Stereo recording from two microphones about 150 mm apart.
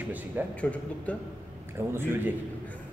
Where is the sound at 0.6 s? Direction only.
10° left (ahead or behind).